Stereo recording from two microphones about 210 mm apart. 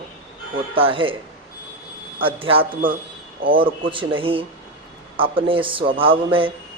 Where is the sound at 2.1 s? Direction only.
25° right (ahead or behind).